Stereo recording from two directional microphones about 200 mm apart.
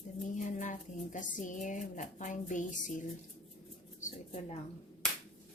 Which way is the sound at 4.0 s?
35° left (ahead or behind).